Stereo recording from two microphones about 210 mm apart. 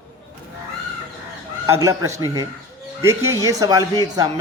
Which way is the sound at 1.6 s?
15° right (ahead or behind).